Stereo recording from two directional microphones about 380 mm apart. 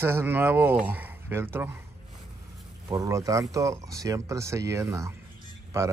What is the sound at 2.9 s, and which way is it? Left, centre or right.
Speech, centre.